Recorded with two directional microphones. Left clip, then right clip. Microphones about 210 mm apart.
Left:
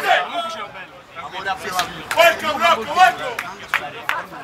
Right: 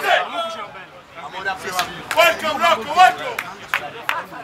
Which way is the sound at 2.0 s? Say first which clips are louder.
Left 1 dB; 50° right (ahead or behind).